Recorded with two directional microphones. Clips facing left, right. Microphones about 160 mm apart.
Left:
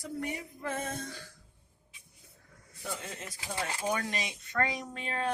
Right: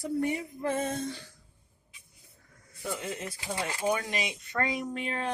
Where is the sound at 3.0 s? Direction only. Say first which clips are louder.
Right 6 dB; 20° right (ahead or behind).